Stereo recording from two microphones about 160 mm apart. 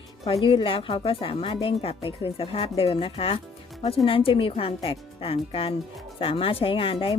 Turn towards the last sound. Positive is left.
turn(degrees=35)  # may be behind; listen again after turning